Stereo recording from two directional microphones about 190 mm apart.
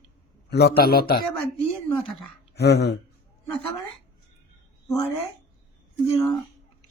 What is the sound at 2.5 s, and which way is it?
Speech, 60° left (ahead or behind).